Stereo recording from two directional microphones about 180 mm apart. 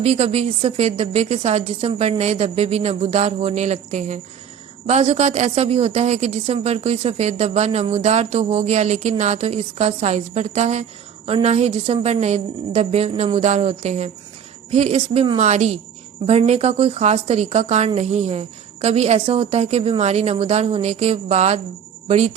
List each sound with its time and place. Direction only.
0.0 s a woman's voice: 35° right (ahead or behind)